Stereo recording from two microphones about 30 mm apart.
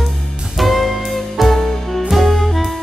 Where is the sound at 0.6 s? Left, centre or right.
Centre.